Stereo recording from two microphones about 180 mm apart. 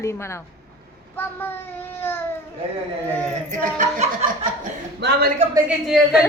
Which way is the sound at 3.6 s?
45° right (ahead or behind).